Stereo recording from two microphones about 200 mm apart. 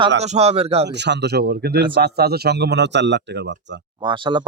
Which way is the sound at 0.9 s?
60° right (ahead or behind).